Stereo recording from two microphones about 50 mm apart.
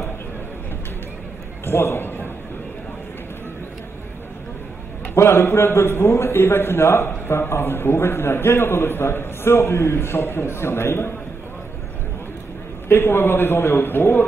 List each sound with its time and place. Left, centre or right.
1.7 s a man's voice: left
5.1 s a man's voice: left
12.8 s speech: left
13.8 s speech: left